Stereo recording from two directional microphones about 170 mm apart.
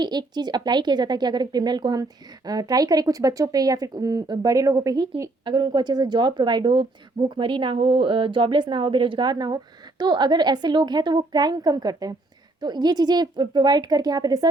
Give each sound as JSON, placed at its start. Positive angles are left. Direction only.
{"t": 0.0, "sound": "speech", "side_deg": -25}